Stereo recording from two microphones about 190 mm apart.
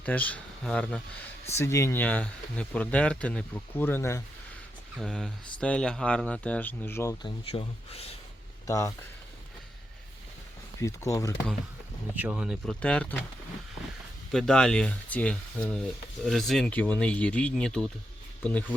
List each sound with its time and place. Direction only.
0.0 s speech: 10° left (ahead or behind)
4.9 s speech: 5° left (ahead or behind)
7.5 s speech: 30° left (ahead or behind)
8.6 s speech: 15° left (ahead or behind)
10.8 s speech: 15° left (ahead or behind)
12.1 s speech: 10° right (ahead or behind)
14.3 s speech: 5° left (ahead or behind)